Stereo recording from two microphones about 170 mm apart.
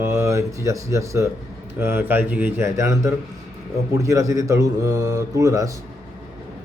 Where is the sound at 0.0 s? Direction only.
15° right (ahead or behind).